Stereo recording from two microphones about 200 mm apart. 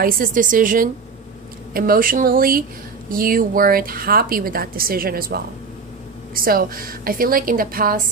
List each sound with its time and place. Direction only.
0.0 s a woman's voice: 45° right (ahead or behind)